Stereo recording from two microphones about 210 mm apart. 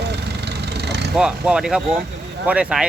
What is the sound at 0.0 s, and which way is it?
Vehicle, 50° right (ahead or behind).